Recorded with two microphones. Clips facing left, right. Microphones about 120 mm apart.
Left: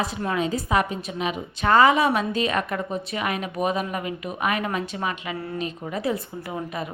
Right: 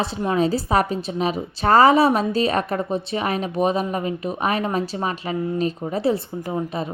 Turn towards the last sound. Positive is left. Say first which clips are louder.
# right 5 dB
turn(degrees=-30)  # may be behind; listen again after turning